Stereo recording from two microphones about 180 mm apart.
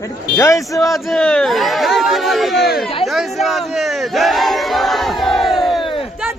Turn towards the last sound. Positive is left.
turn(degrees=0)  # may be behind; listen again after turning